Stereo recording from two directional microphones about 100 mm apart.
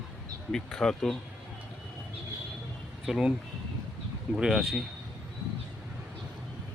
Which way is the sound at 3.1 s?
5° right (ahead or behind).